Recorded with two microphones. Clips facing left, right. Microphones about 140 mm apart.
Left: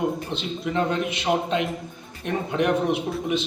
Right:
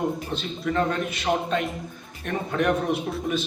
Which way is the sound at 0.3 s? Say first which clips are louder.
Even; 20° left (ahead or behind).